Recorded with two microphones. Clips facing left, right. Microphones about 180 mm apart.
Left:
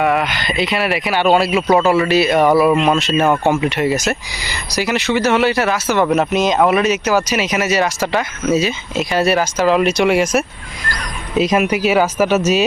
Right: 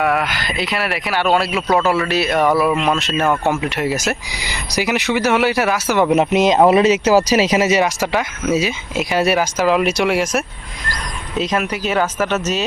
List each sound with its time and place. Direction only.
0.0 s speech: centre (ahead or behind)
6.3 s speech: 25° right (ahead or behind)
8.0 s speech: 5° right (ahead or behind)
11.3 s speech: 10° left (ahead or behind)